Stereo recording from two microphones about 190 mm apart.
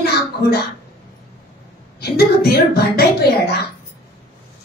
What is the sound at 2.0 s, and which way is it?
A woman's voice, 55° left (ahead or behind).